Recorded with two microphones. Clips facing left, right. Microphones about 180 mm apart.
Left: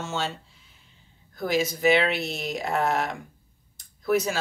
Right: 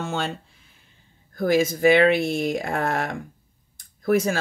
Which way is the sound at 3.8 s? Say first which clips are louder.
Right 3 dB; 50° right (ahead or behind).